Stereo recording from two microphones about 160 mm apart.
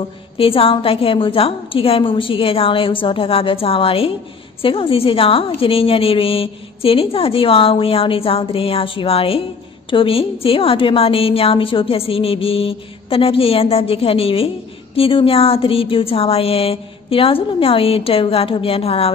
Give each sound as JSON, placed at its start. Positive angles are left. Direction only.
{"t": 0.4, "sound": "a woman's voice", "side_deg": 35}